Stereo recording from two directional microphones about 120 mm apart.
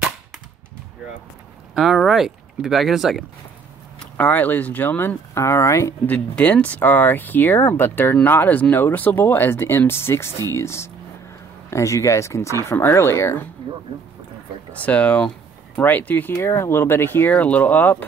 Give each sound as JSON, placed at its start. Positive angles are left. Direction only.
{"t": 1.8, "sound": "speech", "side_deg": 0}
{"t": 4.0, "sound": "speech", "side_deg": 15}
{"t": 6.0, "sound": "speech", "side_deg": 10}
{"t": 14.7, "sound": "speech", "side_deg": 10}